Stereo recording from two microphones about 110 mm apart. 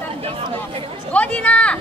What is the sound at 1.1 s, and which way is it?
Speech, 10° left (ahead or behind).